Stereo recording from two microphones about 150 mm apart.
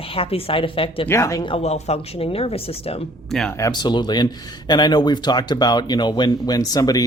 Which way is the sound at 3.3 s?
Centre (ahead or behind).